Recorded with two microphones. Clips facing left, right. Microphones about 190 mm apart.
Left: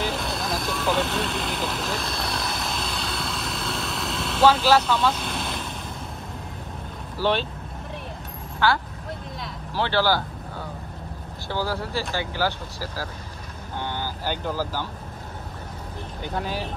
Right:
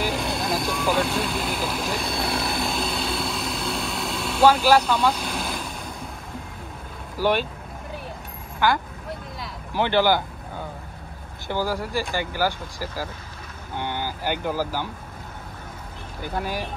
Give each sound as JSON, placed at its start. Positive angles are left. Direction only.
{"t": 0.1, "sound": "vehicle", "side_deg": 0}
{"t": 4.4, "sound": "speech", "side_deg": -10}
{"t": 7.2, "sound": "speech", "side_deg": -10}
{"t": 8.5, "sound": "speech", "side_deg": -15}
{"t": 11.4, "sound": "speech", "side_deg": -15}
{"t": 16.2, "sound": "speech", "side_deg": -10}